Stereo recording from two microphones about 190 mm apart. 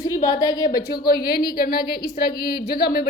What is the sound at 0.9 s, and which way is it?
A woman's voice, 50° left (ahead or behind).